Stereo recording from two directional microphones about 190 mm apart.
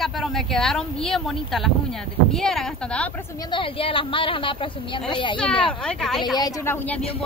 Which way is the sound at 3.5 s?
30° left (ahead or behind).